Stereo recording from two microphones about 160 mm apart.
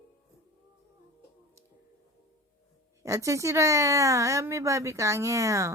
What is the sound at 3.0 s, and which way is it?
A woman's voice, 20° right (ahead or behind).